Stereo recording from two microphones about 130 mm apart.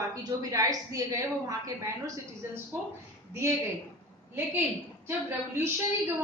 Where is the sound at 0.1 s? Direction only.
30° right (ahead or behind).